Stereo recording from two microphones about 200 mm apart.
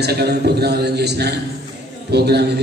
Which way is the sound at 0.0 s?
55° right (ahead or behind).